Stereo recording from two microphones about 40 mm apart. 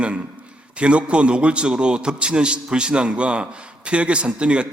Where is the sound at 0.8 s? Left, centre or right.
Right.